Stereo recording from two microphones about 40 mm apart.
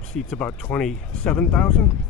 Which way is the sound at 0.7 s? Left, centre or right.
Left.